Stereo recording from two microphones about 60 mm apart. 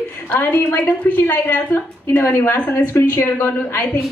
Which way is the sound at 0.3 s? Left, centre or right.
Left.